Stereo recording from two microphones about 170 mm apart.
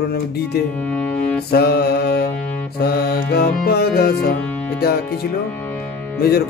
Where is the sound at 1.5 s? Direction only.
70° left (ahead or behind).